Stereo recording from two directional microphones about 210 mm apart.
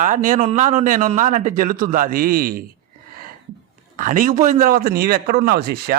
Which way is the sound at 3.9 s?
40° right (ahead or behind).